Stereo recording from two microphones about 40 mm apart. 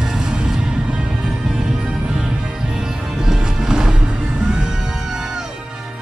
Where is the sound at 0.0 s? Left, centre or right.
Centre.